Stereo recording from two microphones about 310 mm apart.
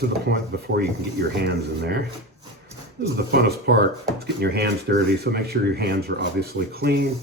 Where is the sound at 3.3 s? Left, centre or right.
Right.